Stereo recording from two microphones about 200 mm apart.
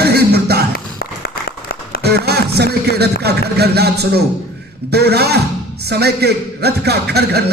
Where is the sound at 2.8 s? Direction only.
55° right (ahead or behind).